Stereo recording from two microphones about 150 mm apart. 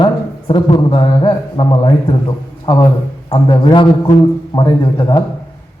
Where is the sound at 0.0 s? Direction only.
30° left (ahead or behind).